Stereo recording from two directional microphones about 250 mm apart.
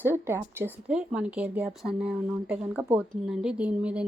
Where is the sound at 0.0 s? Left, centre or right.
Centre.